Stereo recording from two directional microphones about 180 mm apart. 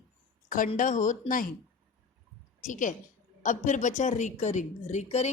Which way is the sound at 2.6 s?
45° left (ahead or behind).